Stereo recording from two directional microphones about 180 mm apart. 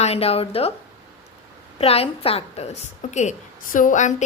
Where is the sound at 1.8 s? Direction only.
35° left (ahead or behind).